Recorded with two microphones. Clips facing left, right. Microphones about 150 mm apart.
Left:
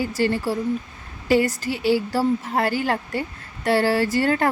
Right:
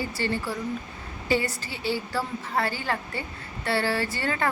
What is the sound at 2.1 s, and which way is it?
Speech, 40° left (ahead or behind).